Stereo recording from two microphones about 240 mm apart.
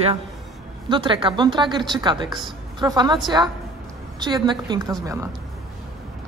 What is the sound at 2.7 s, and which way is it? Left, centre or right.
Speech, centre.